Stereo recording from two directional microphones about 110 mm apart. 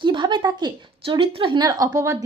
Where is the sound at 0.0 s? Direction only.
45° right (ahead or behind).